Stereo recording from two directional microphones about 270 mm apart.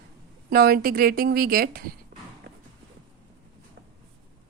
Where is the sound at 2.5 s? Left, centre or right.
Right.